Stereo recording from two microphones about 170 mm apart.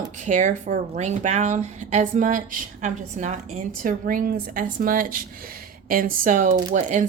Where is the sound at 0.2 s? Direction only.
45° right (ahead or behind).